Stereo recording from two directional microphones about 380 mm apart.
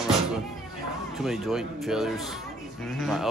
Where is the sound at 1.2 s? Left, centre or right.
Centre.